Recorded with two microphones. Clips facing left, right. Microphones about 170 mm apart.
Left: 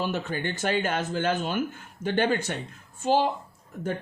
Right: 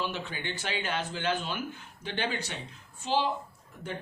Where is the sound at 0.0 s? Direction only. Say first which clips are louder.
Left 6 dB; 45° left (ahead or behind).